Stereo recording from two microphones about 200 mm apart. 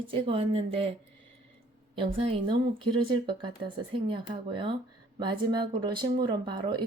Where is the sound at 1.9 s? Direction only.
25° right (ahead or behind).